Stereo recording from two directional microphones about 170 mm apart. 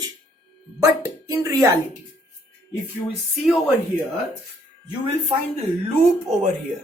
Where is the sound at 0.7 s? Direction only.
15° right (ahead or behind).